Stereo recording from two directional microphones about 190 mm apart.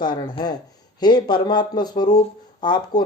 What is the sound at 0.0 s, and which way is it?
Speech, 25° left (ahead or behind).